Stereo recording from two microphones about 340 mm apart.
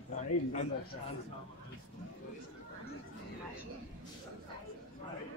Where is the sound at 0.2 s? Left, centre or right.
Left.